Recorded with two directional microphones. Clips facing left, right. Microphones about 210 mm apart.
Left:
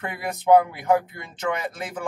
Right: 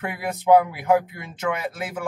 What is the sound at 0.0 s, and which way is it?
Speech, 5° right (ahead or behind).